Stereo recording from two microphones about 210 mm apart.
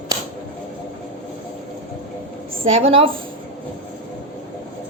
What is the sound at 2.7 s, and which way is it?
Speech, 25° right (ahead or behind).